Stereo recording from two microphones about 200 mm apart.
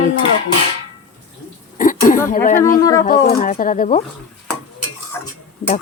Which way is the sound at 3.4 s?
45° left (ahead or behind).